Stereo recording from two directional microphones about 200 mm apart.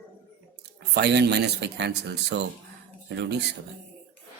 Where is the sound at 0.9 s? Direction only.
60° right (ahead or behind).